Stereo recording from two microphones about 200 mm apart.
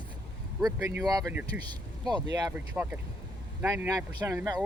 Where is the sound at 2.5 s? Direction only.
10° right (ahead or behind).